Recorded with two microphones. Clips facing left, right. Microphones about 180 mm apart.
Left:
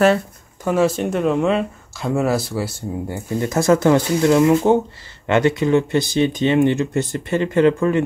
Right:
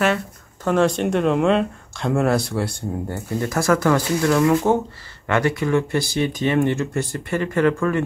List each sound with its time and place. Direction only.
0.7 s speech: 5° left (ahead or behind)
3.3 s speech: 20° left (ahead or behind)